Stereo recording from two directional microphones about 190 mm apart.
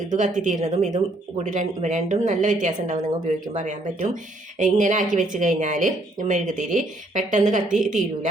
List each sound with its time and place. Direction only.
0.3 s a woman's voice: 40° right (ahead or behind)